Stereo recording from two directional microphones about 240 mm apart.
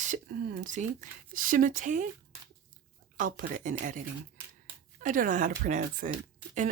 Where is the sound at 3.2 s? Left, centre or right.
Right.